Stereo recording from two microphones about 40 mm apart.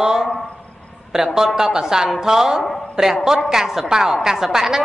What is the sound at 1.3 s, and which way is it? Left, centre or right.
A woman's voice, centre.